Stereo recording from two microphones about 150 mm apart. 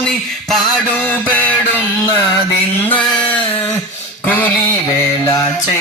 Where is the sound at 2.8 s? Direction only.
10° left (ahead or behind).